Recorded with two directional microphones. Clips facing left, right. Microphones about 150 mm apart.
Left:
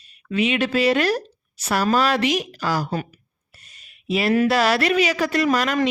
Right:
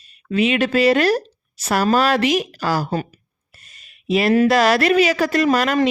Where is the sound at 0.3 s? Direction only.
40° right (ahead or behind).